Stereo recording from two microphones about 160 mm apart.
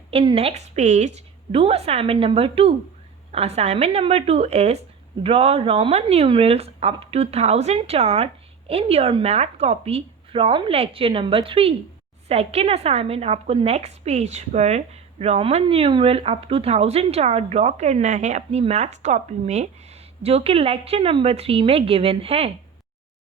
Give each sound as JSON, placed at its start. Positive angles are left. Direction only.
{"t": 0.1, "sound": "a woman's voice", "side_deg": -35}